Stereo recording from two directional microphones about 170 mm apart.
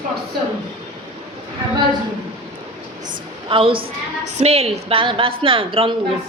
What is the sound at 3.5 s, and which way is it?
A woman's voice, 30° right (ahead or behind).